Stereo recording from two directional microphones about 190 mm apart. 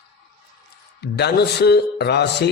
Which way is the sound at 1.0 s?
60° left (ahead or behind).